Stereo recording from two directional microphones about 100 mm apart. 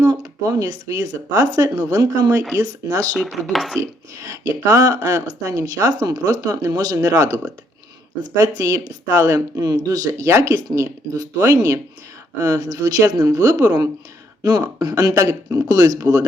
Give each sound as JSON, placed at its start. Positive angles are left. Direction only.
{"t": 0.0, "sound": "speech", "side_deg": -40}
{"t": 3.2, "sound": "speech", "side_deg": 0}
{"t": 3.8, "sound": "speech", "side_deg": -30}
{"t": 8.4, "sound": "speech", "side_deg": -40}